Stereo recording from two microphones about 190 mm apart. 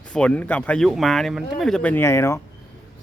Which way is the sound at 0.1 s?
5° left (ahead or behind).